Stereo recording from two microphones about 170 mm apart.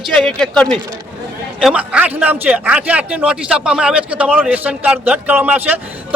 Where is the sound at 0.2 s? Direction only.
5° left (ahead or behind).